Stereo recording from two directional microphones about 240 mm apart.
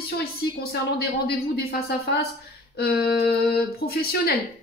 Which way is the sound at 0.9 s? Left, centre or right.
Left.